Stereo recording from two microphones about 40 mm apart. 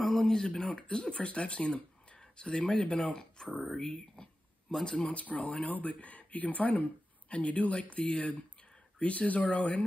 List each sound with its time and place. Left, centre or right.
0.0 s a sound: centre
0.6 s speech: centre
1.2 s speech: left
5.0 s speech: left